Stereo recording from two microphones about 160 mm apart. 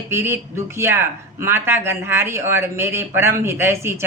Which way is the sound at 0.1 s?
15° right (ahead or behind).